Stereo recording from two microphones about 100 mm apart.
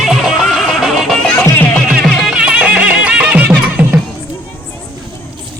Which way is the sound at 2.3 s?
10° right (ahead or behind).